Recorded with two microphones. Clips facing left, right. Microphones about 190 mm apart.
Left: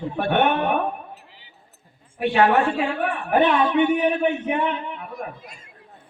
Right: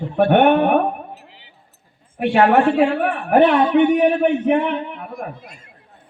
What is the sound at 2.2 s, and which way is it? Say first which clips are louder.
A man's voice: right 4 dB; 60° right (ahead or behind).